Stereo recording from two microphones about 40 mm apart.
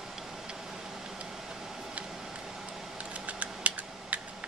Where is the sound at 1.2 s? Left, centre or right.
Centre.